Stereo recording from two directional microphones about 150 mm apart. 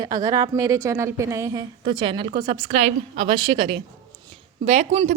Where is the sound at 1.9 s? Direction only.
30° right (ahead or behind).